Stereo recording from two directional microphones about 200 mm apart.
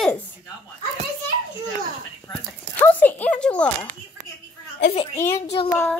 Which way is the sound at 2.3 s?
10° left (ahead or behind).